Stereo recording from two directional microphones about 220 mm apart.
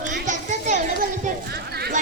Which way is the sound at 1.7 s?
45° right (ahead or behind).